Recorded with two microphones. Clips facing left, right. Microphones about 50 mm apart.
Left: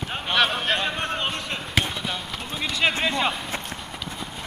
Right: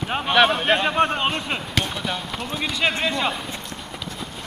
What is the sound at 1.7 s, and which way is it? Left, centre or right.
Basketball bounce, centre.